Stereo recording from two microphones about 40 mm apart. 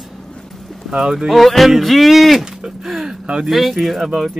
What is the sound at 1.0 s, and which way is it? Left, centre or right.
Speech, centre.